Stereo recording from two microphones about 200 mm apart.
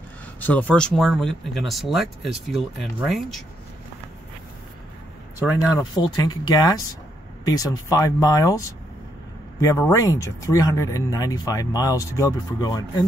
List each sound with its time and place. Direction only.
0.4 s speech: 10° left (ahead or behind)
5.9 s speech: 20° left (ahead or behind)